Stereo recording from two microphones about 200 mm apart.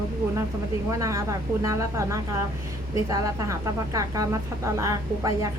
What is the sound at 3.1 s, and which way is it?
Speech, 15° right (ahead or behind).